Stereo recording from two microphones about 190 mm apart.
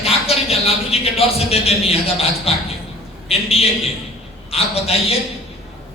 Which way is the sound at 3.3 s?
30° left (ahead or behind).